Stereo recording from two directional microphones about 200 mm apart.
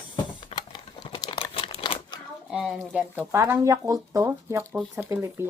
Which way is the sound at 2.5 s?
Centre (ahead or behind).